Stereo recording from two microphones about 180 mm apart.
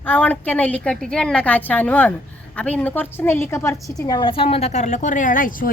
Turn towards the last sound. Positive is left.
turn(degrees=50)  # may be behind; listen again after turning